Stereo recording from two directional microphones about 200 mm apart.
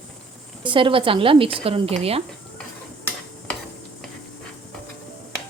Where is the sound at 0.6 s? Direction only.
25° right (ahead or behind).